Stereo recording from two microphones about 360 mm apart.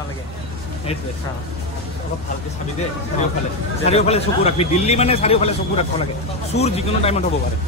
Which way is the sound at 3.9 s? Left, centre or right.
Centre.